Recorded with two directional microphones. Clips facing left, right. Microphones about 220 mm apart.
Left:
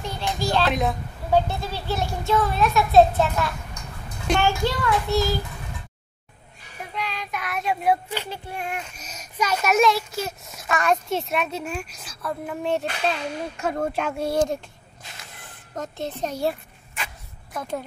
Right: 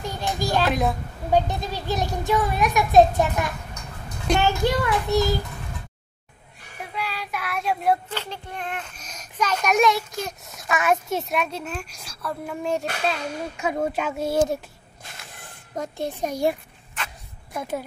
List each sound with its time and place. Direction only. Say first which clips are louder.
0.0 s a child's voice: even; 15° right (ahead or behind)
0.7 s a child's voice: right 1 dB; centre (ahead or behind)
1.3 s a child's voice: even; 15° right (ahead or behind)
6.9 s child singing: even; 5° right (ahead or behind)
8.1 s a child's voice: left 1 dB; 10° left (ahead or behind); by 14.6 s 5° right (ahead or behind)
15.7 s a child's voice: right 2 dB; 10° right (ahead or behind)
17.6 s a child's voice: right 1 dB; 5° right (ahead or behind)